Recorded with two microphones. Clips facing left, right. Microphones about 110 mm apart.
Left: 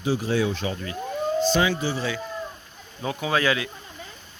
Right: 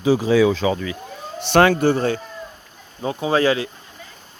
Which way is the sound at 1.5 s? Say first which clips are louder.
Right 8 dB; 65° right (ahead or behind).